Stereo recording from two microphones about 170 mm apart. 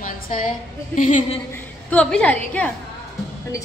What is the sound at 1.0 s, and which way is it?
Speech, 50° left (ahead or behind).